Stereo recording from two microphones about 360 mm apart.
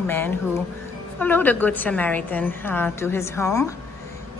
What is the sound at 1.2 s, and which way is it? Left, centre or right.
A woman's voice, centre.